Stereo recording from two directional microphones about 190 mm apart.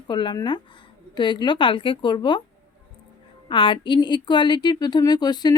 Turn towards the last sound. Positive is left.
turn(degrees=20)  # may be behind; listen again after turning